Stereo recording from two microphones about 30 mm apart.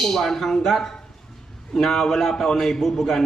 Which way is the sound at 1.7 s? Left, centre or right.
Centre.